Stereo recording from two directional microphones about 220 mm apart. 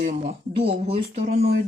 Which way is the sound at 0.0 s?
35° right (ahead or behind).